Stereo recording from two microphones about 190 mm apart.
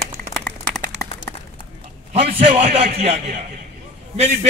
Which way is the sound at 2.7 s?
35° right (ahead or behind).